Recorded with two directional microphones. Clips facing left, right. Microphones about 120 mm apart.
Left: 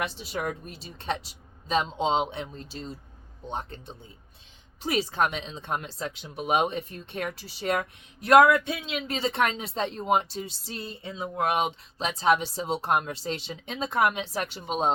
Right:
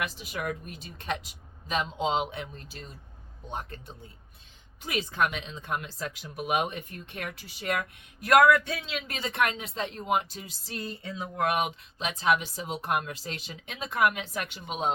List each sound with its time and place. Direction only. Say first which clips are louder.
0.0 s speech: left 3 dB; 30° left (ahead or behind)